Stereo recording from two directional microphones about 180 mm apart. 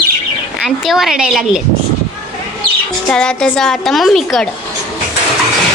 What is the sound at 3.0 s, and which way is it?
A child's voice, 5° left (ahead or behind).